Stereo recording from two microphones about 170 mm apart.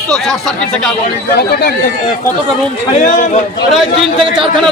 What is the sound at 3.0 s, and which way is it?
Speech, 50° left (ahead or behind).